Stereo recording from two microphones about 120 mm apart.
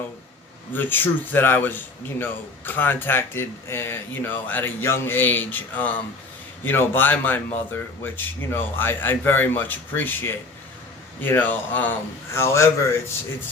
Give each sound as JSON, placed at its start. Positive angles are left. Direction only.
{"t": 0.7, "sound": "a man's voice", "side_deg": 15}